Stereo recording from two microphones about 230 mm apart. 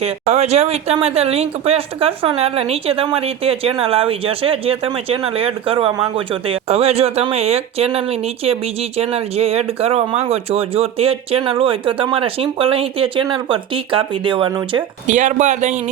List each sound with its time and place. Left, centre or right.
0.0 s speech: right
15.0 s speech: right